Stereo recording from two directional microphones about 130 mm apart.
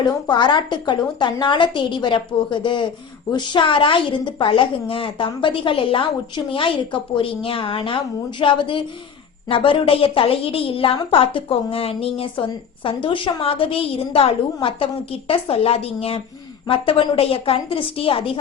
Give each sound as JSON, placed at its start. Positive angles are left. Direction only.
{"t": 0.0, "sound": "a woman's voice", "side_deg": 35}